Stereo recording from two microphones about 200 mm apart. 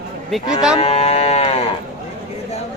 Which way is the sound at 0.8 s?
30° left (ahead or behind).